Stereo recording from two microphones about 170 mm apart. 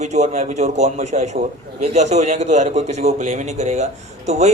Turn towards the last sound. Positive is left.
turn(degrees=-45)  # may be behind; listen again after turning